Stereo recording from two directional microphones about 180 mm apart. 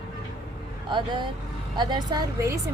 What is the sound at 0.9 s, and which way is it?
A woman's voice, 25° right (ahead or behind).